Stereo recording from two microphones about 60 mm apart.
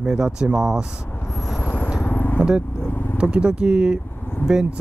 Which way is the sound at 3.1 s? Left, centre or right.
Centre.